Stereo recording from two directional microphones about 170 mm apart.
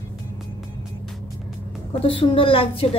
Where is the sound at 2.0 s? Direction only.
30° left (ahead or behind).